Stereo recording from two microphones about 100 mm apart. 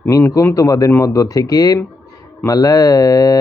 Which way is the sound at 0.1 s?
30° left (ahead or behind).